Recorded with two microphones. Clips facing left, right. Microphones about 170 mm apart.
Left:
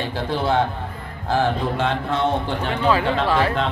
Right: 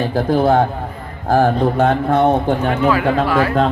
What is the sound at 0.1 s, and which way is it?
A man's voice, 45° right (ahead or behind).